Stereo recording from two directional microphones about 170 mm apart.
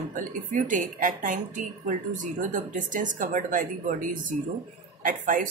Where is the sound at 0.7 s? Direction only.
50° right (ahead or behind).